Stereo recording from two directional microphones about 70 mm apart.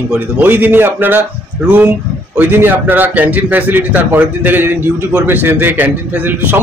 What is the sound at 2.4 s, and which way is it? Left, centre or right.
A man's voice, right.